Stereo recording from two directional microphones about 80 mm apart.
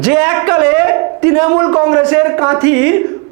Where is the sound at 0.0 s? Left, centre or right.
Centre.